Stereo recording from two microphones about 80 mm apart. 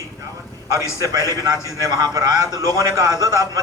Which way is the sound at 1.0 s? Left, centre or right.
Right.